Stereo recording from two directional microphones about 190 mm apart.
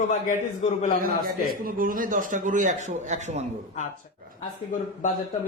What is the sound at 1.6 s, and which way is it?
A man's voice, 45° right (ahead or behind).